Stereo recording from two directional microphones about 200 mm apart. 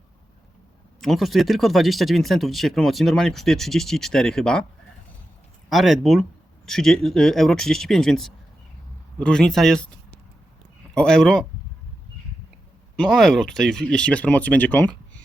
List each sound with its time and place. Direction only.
1.0 s speech: centre (ahead or behind)
5.6 s speech: centre (ahead or behind)
13.0 s speech: centre (ahead or behind)